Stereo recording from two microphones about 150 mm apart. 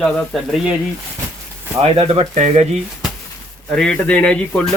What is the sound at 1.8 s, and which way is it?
Speech, 40° right (ahead or behind).